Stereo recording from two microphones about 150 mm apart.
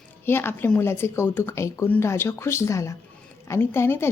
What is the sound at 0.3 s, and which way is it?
A woman's voice, 15° left (ahead or behind).